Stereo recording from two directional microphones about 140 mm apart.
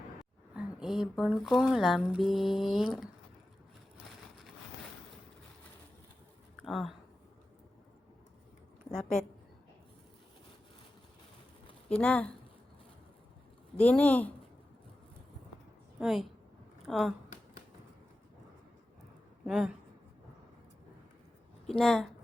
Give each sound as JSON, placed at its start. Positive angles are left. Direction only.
{"t": 0.5, "sound": "speech", "side_deg": -5}
{"t": 6.6, "sound": "a sound", "side_deg": 0}
{"t": 8.9, "sound": "speech", "side_deg": 5}
{"t": 11.9, "sound": "speech", "side_deg": 10}
{"t": 13.7, "sound": "speech", "side_deg": 10}
{"t": 16.0, "sound": "a woman's voice", "side_deg": -5}
{"t": 19.5, "sound": "speech", "side_deg": -5}
{"t": 21.7, "sound": "speech", "side_deg": 5}